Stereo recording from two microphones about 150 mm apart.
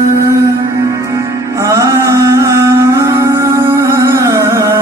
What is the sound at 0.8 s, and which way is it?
Music, 20° right (ahead or behind).